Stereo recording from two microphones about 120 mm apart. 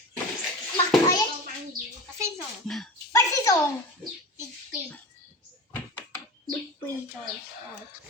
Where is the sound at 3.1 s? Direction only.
25° left (ahead or behind).